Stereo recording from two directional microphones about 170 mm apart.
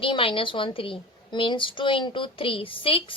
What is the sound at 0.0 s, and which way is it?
A woman's voice, 30° left (ahead or behind).